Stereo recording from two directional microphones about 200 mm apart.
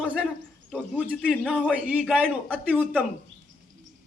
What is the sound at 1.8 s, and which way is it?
Speech, 5° right (ahead or behind).